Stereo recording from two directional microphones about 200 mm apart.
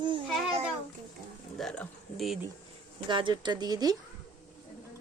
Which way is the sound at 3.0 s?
25° right (ahead or behind).